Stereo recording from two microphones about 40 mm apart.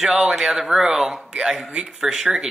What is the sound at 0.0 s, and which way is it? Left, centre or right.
Speech, centre.